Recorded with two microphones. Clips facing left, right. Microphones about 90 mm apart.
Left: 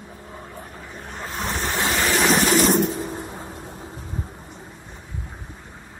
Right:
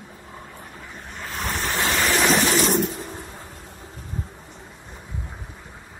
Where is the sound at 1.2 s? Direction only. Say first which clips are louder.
Left 1 dB; 25° left (ahead or behind).